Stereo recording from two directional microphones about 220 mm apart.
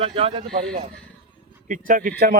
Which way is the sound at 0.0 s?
25° right (ahead or behind).